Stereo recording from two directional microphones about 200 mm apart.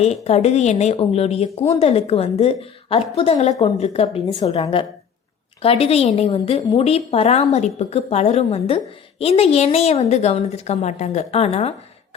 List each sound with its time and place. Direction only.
0.0 s a woman's voice: 30° left (ahead or behind)